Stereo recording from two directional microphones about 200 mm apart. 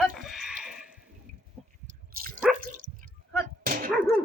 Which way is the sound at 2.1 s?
45° right (ahead or behind).